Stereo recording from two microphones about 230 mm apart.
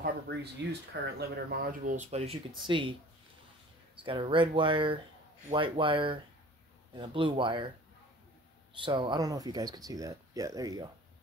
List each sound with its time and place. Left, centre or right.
0.0 s speech: right
4.0 s speech: right
8.7 s speech: right